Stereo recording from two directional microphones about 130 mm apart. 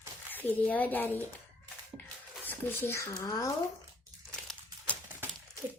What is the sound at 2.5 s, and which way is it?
Speech, 20° left (ahead or behind).